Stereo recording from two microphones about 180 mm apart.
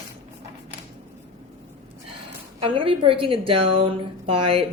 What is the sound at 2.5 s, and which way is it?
A woman's voice, 30° right (ahead or behind).